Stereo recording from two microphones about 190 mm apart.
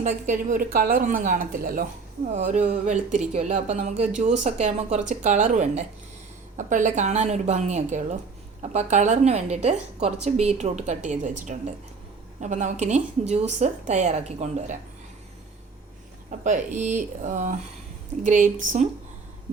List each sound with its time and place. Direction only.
0.0 s a woman's voice: 40° right (ahead or behind)
2.3 s a woman's voice: 35° right (ahead or behind)
16.4 s a woman's voice: 40° right (ahead or behind)